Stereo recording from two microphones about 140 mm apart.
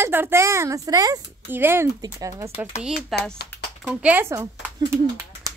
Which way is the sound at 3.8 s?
10° right (ahead or behind).